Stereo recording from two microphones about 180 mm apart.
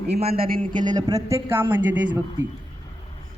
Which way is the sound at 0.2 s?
35° right (ahead or behind).